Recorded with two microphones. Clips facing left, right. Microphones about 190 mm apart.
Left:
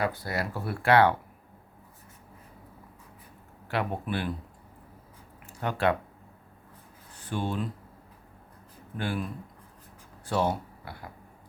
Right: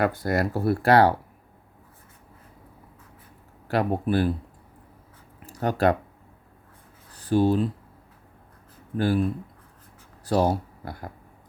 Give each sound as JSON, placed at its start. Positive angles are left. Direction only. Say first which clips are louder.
{"t": 0.0, "sound": "speech", "louder": "right 7 dB", "side_deg": -50}
{"t": 3.7, "sound": "speech", "louder": "right 7 dB", "side_deg": -40}
{"t": 5.4, "sound": "a sound", "louder": "right 5 dB", "side_deg": -40}
{"t": 7.1, "sound": "speech", "louder": "right 11 dB", "side_deg": -35}
{"t": 9.0, "sound": "speech", "louder": "right 9 dB", "side_deg": -40}
{"t": 10.2, "sound": "speech", "louder": "right 5 dB", "side_deg": -40}